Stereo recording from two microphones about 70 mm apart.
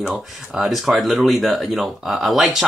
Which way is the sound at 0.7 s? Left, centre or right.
Centre.